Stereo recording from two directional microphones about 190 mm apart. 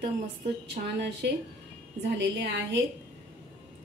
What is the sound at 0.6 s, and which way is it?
A woman's voice, 60° right (ahead or behind).